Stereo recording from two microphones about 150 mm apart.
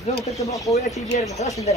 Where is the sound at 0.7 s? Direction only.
45° left (ahead or behind).